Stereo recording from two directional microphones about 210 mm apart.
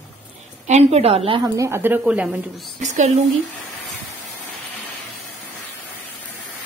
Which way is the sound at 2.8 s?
35° right (ahead or behind).